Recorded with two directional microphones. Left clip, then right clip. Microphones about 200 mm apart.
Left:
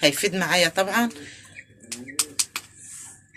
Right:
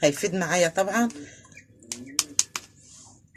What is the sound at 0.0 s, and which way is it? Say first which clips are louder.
Speech: left 2 dB; 35° right (ahead or behind).